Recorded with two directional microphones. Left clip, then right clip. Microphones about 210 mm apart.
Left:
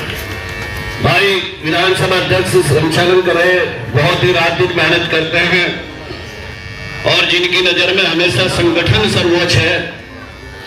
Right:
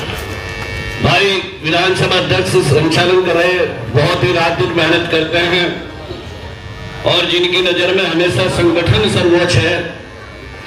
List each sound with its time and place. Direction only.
1.0 s a man's voice: 25° left (ahead or behind)
2.9 s music: 25° left (ahead or behind)
3.9 s a man's voice: 20° left (ahead or behind)
7.0 s a man's voice: centre (ahead or behind)